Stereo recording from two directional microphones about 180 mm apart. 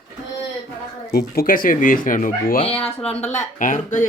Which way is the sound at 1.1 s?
55° left (ahead or behind).